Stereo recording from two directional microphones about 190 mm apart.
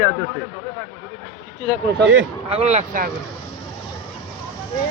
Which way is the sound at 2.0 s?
70° right (ahead or behind).